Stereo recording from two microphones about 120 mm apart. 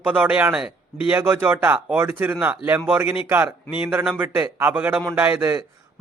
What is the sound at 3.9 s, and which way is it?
Speech, 15° right (ahead or behind).